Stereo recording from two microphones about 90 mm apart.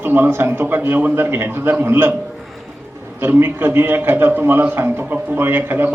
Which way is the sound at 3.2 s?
25° right (ahead or behind).